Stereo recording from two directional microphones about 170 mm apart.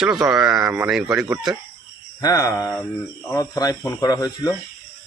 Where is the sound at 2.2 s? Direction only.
20° left (ahead or behind).